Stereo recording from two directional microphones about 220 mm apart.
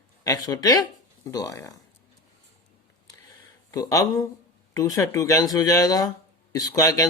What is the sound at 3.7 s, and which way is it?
Speech, 15° left (ahead or behind).